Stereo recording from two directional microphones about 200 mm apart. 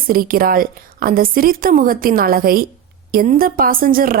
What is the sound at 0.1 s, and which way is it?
A woman's voice, 45° right (ahead or behind).